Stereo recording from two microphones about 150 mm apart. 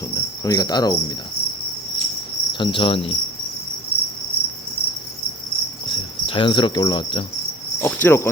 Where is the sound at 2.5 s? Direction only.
35° left (ahead or behind).